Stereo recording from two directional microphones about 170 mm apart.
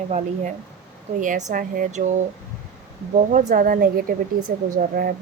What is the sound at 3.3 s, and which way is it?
Speech, 50° right (ahead or behind).